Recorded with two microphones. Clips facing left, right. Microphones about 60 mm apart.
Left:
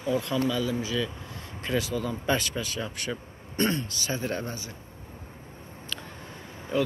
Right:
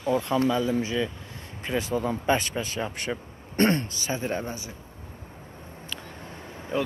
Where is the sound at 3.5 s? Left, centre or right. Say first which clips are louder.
Right 4 dB; right.